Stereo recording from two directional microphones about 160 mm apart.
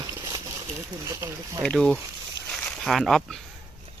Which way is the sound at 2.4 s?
5° left (ahead or behind).